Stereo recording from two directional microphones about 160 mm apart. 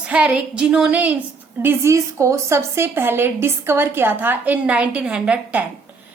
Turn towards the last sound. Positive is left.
turn(degrees=-5)  # may be behind; listen again after turning